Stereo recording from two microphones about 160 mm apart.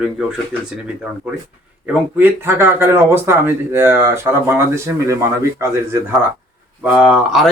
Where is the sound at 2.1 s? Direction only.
15° right (ahead or behind).